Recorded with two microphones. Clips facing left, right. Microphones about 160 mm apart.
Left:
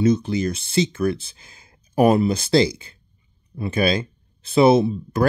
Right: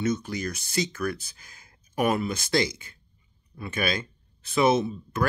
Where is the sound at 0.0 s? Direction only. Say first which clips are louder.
Left 9 dB; 30° left (ahead or behind).